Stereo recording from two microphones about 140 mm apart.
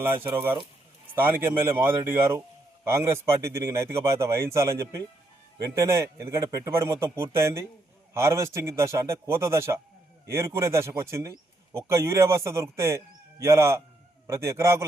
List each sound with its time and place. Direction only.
0.0 s a man's voice: 15° right (ahead or behind)